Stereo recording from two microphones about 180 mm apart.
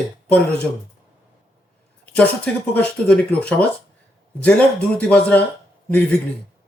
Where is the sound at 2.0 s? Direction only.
10° left (ahead or behind).